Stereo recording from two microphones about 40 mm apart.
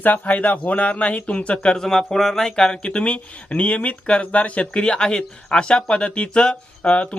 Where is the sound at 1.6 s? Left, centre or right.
Centre.